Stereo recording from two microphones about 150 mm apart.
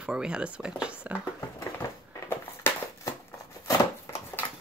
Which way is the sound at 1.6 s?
20° left (ahead or behind).